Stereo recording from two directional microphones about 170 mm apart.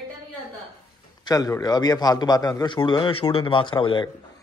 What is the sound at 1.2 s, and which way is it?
A man's voice, 20° left (ahead or behind).